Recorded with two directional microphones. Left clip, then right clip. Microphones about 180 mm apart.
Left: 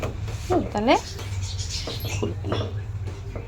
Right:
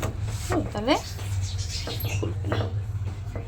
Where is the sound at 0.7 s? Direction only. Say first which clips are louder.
Left 4 dB; 40° left (ahead or behind).